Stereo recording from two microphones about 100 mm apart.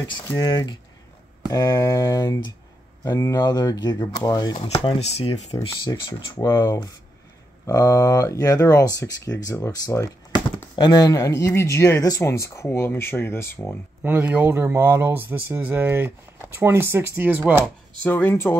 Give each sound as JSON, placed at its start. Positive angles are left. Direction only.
{"t": 0.4, "sound": "speech", "side_deg": 40}
{"t": 4.6, "sound": "speech", "side_deg": 80}
{"t": 5.9, "sound": "speech", "side_deg": 45}
{"t": 6.4, "sound": "speech", "side_deg": 35}
{"t": 14.0, "sound": "speech", "side_deg": -15}
{"t": 18.0, "sound": "speech", "side_deg": 20}